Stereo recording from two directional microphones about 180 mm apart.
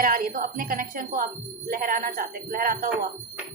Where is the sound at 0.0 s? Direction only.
50° right (ahead or behind).